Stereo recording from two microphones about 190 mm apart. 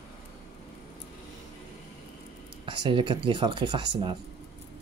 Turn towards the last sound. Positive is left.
turn(degrees=-25)  # may be behind; listen again after turning